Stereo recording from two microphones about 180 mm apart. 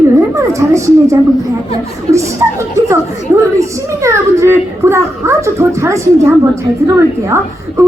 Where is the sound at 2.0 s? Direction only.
15° right (ahead or behind).